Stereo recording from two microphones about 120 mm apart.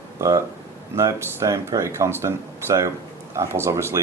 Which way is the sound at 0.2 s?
25° right (ahead or behind).